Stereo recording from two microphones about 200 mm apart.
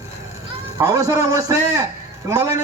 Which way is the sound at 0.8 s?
15° right (ahead or behind).